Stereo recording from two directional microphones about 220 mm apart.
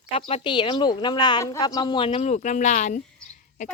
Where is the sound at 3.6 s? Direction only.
35° left (ahead or behind).